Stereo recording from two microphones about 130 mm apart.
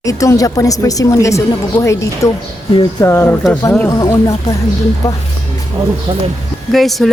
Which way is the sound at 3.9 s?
30° left (ahead or behind).